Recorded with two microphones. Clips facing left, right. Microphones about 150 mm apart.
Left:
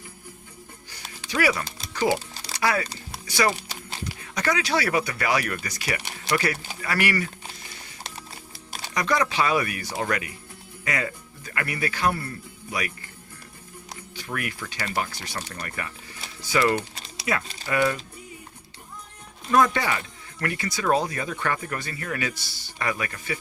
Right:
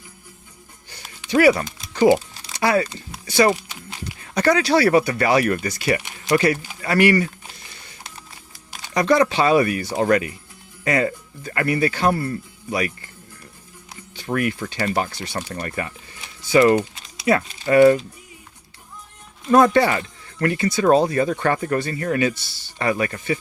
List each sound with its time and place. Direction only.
1.3 s speech: 30° right (ahead or behind)
1.9 s music: 25° right (ahead or behind)
2.6 s speech: 30° right (ahead or behind)
3.7 s a sound: 30° left (ahead or behind)
4.4 s speech: 35° right (ahead or behind)
8.3 s music: 35° left (ahead or behind)
9.0 s speech: 30° right (ahead or behind)
14.3 s speech: 35° right (ahead or behind)
19.5 s speech: 35° right (ahead or behind)